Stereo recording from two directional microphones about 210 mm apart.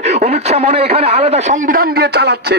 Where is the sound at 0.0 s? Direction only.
30° right (ahead or behind).